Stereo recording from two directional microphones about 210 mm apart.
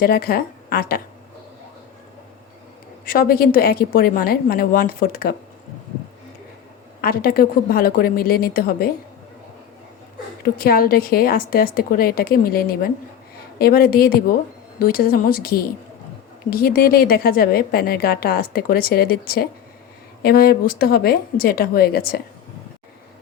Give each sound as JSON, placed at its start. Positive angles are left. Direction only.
{"t": 0.0, "sound": "a woman's voice", "side_deg": 45}
{"t": 3.1, "sound": "a woman's voice", "side_deg": 45}
{"t": 7.0, "sound": "a woman's voice", "side_deg": 45}
{"t": 10.4, "sound": "a woman's voice", "side_deg": 45}